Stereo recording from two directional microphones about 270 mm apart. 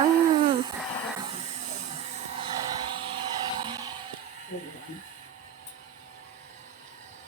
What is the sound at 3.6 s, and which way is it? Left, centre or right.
Music, centre.